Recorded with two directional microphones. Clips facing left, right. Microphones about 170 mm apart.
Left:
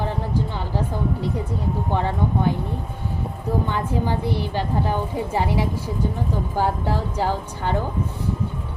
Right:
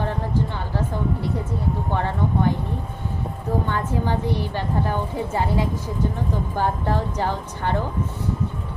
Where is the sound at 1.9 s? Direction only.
15° left (ahead or behind).